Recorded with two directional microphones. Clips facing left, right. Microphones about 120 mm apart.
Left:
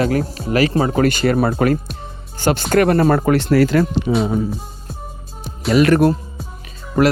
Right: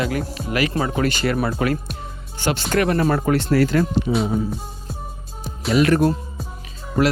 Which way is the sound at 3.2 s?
75° left (ahead or behind).